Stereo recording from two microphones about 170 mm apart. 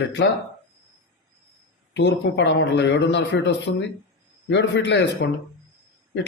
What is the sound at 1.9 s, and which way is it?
Speech, 90° left.